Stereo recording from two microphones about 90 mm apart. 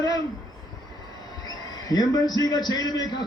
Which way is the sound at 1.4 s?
45° left (ahead or behind).